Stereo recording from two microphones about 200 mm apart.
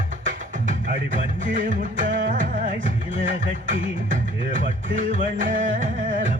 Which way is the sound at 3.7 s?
40° right (ahead or behind).